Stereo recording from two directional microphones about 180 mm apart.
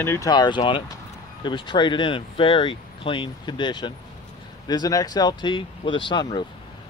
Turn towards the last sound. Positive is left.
turn(degrees=25)  # may be behind; listen again after turning